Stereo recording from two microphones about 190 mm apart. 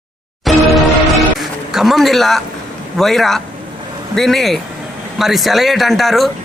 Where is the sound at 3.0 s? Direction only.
Centre (ahead or behind).